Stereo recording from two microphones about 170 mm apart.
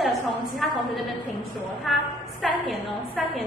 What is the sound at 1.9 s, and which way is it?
A woman's voice, centre (ahead or behind).